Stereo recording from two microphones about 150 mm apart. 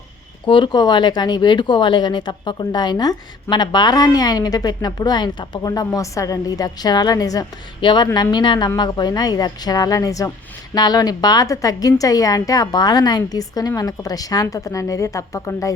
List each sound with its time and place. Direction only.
0.4 s speech: 30° left (ahead or behind)